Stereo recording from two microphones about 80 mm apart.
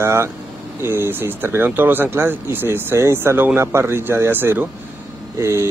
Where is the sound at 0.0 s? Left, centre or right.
Right.